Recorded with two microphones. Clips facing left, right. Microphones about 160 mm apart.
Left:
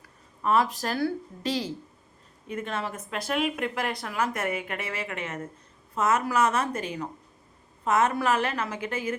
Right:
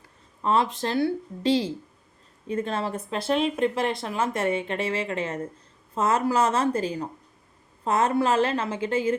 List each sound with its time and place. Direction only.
0.4 s speech: 25° right (ahead or behind)